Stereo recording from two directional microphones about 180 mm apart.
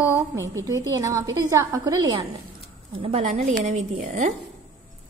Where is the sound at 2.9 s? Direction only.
35° right (ahead or behind).